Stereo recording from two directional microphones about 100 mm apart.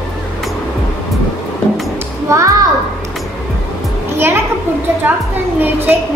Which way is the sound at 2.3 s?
30° right (ahead or behind).